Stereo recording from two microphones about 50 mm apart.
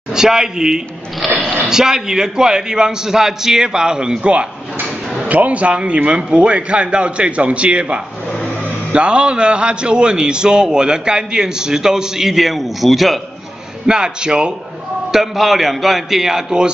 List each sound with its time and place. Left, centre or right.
0.1 s a man's voice: centre
13.8 s a man's voice: centre
15.0 s a man's voice: centre